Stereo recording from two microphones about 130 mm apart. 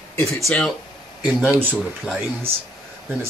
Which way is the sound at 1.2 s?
10° right (ahead or behind).